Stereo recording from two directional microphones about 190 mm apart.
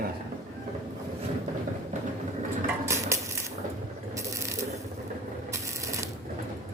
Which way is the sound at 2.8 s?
15° right (ahead or behind).